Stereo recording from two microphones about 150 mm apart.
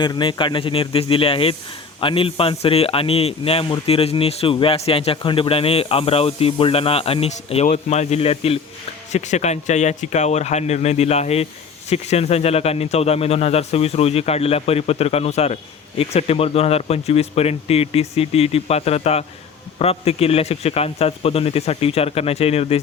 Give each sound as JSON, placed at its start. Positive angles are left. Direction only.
{"t": 0.0, "sound": "a man's voice", "side_deg": 30}